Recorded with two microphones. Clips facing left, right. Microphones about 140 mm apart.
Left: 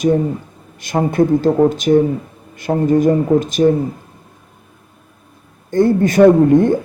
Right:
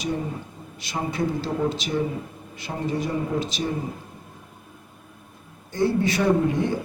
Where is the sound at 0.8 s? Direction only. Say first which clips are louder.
Left 12 dB; 50° left (ahead or behind).